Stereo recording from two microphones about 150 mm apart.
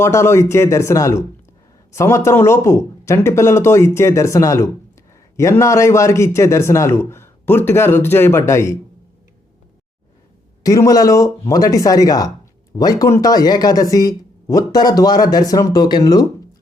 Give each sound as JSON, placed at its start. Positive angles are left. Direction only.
{"t": 0.0, "sound": "speech", "side_deg": 20}
{"t": 10.6, "sound": "speech", "side_deg": 20}